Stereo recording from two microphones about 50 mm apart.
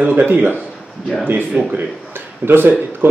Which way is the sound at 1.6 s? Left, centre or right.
Right.